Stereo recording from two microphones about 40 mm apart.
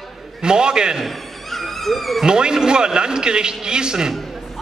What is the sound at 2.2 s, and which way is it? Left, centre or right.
A man's voice, centre.